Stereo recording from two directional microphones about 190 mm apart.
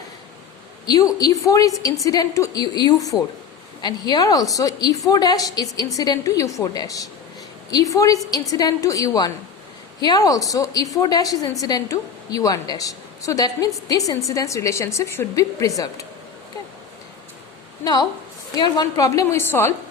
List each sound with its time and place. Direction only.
0.9 s a woman's voice: 20° left (ahead or behind)
18.5 s a woman's voice: 20° left (ahead or behind)